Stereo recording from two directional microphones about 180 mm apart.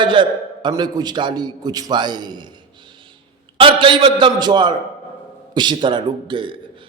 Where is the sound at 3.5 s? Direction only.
30° right (ahead or behind).